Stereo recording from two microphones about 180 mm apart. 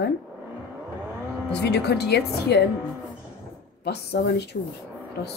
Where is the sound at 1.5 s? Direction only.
70° left (ahead or behind).